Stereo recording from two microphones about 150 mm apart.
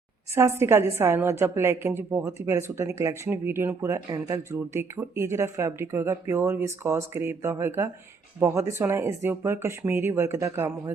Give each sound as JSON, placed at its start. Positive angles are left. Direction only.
{"t": 0.6, "sound": "a woman's voice", "side_deg": -15}